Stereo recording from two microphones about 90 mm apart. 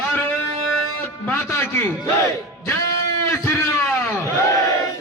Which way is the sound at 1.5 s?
25° left (ahead or behind).